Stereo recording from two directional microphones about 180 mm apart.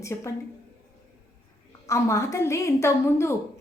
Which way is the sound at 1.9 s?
15° left (ahead or behind).